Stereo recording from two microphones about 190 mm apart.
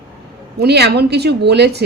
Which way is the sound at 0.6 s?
60° right (ahead or behind).